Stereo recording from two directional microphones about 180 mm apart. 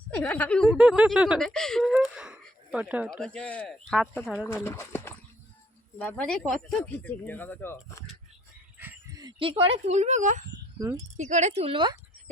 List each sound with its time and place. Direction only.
0.1 s speech: 10° left (ahead or behind)
0.7 s speech: 5° right (ahead or behind)
3.1 s speech: 5° left (ahead or behind)
8.8 s a sound: 10° right (ahead or behind)
9.2 s speech: 30° right (ahead or behind); by 10.4 s 45° right (ahead or behind)
10.8 s speech: 20° right (ahead or behind)
11.2 s speech: 40° right (ahead or behind)